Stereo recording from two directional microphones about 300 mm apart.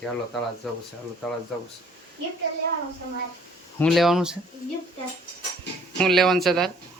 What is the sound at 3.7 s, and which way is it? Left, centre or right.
Speech, centre.